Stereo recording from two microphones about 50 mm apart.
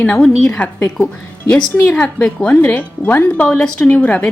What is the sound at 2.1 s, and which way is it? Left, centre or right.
Speech, centre.